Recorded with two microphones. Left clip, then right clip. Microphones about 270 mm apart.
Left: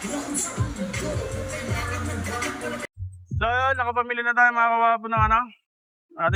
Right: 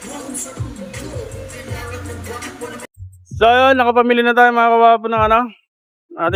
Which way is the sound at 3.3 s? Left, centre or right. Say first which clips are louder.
Right 12 dB; right.